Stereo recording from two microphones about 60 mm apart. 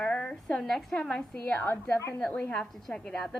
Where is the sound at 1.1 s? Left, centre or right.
Left.